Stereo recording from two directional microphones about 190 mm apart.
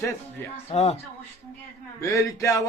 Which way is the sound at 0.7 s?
35° left (ahead or behind).